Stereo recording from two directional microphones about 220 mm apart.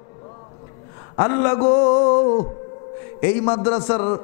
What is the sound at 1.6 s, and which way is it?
Speech, 25° left (ahead or behind).